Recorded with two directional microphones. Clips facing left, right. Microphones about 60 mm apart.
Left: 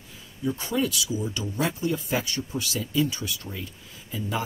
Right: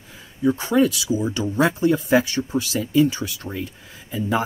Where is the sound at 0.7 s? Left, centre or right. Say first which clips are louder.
Right 7 dB; right.